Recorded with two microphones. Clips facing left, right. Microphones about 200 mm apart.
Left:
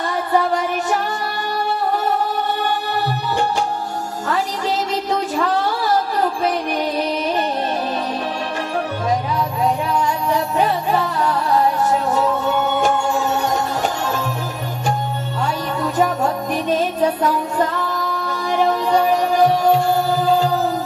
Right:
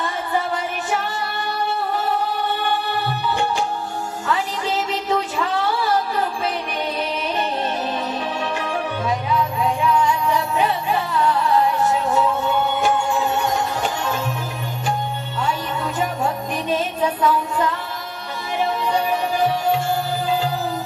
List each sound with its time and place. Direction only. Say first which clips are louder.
0.8 s music: left 3 dB; 45° left (ahead or behind)
9.8 s music: right 1 dB; 40° left (ahead or behind)
17.2 s music: left 1 dB; 45° left (ahead or behind)